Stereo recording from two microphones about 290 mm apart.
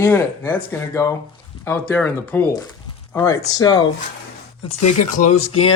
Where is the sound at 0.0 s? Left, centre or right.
Centre.